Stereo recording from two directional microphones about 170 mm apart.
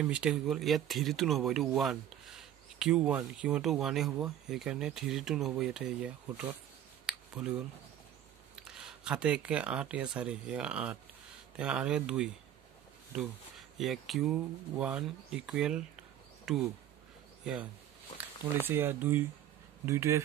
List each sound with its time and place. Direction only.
0.0 s speech: 5° right (ahead or behind)
7.1 s a sound: 5° right (ahead or behind)
8.5 s speech: 5° right (ahead or behind)
13.7 s speech: centre (ahead or behind)
18.7 s speech: 15° right (ahead or behind)